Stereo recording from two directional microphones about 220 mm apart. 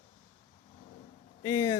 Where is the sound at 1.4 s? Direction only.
15° left (ahead or behind).